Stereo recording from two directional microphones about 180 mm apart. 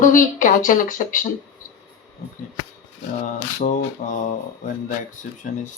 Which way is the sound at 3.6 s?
45° left (ahead or behind).